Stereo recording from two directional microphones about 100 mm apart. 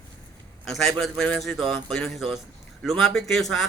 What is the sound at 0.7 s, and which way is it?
Speech, centre (ahead or behind).